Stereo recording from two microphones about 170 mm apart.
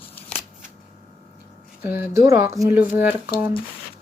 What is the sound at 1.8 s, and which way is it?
Speech, 15° right (ahead or behind).